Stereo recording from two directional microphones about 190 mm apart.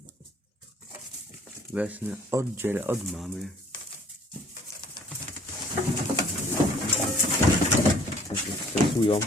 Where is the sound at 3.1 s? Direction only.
Centre (ahead or behind).